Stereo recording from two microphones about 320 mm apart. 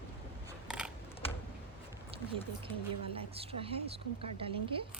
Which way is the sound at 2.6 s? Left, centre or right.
Centre.